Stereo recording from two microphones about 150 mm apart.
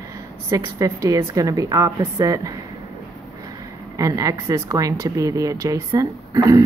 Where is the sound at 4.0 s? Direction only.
20° right (ahead or behind).